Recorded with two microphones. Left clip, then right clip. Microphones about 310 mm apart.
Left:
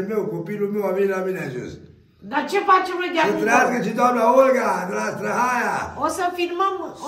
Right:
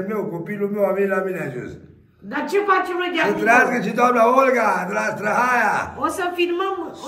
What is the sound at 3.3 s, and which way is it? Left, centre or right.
A man's voice, centre.